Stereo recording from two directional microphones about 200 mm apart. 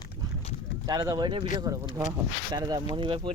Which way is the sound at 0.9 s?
20° right (ahead or behind).